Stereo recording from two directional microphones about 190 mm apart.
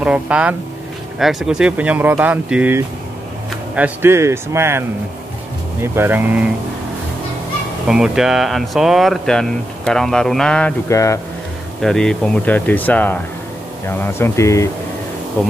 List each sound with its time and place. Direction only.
0.0 s speech: 5° right (ahead or behind)
7.9 s speech: 5° right (ahead or behind)
10.9 s speech: 15° left (ahead or behind)
11.8 s speech: 5° left (ahead or behind)